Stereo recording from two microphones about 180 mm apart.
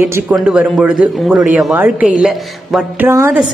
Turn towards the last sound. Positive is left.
turn(degrees=-10)  # may be behind; listen again after turning